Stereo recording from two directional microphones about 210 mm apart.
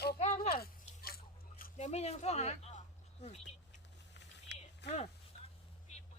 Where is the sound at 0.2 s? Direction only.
30° left (ahead or behind).